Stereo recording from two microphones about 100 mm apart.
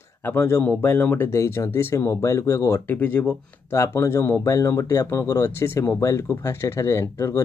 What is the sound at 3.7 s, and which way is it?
Speech, 30° left (ahead or behind).